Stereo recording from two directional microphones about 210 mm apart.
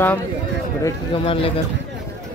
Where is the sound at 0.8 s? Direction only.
25° left (ahead or behind).